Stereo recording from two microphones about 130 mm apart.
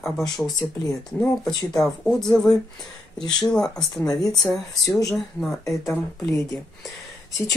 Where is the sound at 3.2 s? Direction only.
35° left (ahead or behind).